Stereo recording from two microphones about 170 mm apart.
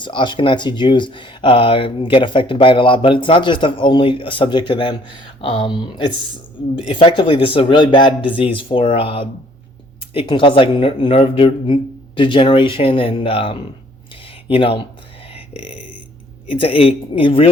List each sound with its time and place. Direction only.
0.0 s speech: 30° left (ahead or behind)
15.4 s a sound: 35° left (ahead or behind)
16.5 s speech: 30° left (ahead or behind)